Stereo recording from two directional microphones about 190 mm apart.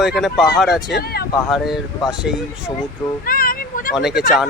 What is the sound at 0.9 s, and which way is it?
Speech, 55° left (ahead or behind).